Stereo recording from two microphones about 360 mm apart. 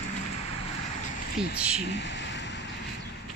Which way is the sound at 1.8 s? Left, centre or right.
Left.